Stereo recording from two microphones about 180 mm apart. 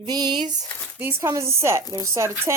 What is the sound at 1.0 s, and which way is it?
Speech, 15° right (ahead or behind).